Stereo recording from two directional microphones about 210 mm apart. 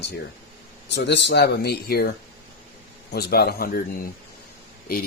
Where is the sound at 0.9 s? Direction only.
55° left (ahead or behind).